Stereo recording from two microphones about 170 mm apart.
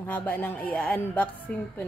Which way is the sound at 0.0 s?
10° left (ahead or behind).